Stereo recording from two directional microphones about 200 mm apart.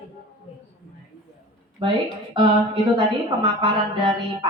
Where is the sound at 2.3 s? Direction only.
25° right (ahead or behind).